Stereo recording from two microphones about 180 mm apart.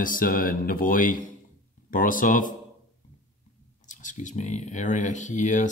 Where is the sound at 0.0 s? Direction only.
50° left (ahead or behind).